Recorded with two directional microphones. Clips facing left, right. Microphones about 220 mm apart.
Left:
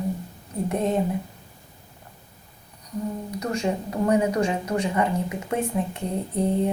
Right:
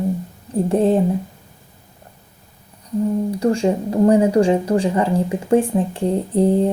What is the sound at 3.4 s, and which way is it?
A woman's voice, 30° right (ahead or behind).